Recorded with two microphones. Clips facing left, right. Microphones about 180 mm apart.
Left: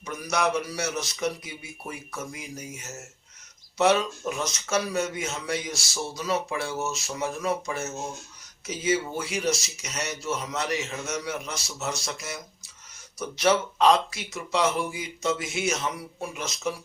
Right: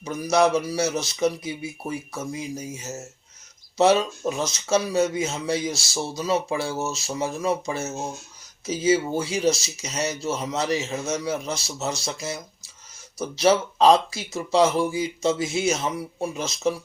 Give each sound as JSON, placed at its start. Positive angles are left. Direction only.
{"t": 0.0, "sound": "speech", "side_deg": -30}